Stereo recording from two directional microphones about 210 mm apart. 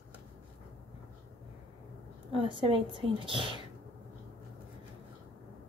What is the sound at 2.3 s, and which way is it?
Speech, 25° right (ahead or behind).